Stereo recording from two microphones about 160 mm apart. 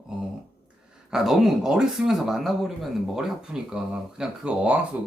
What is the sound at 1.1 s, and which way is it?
Speech, 5° right (ahead or behind).